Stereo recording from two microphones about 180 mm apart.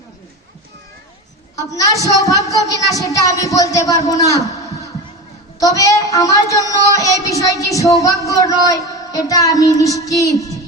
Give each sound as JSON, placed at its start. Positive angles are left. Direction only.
{"t": 1.5, "sound": "speech", "side_deg": 20}